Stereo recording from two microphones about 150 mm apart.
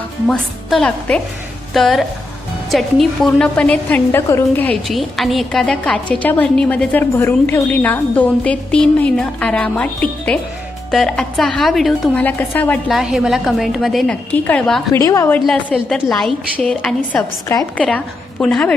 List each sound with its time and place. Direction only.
0.3 s a woman's voice: 5° left (ahead or behind)
4.9 s a woman's voice: centre (ahead or behind)
12.2 s a woman's voice: 10° left (ahead or behind)
12.9 s a woman's voice: 5° right (ahead or behind); by 15.4 s 20° left (ahead or behind)
15.7 s a woman's voice: 5° left (ahead or behind)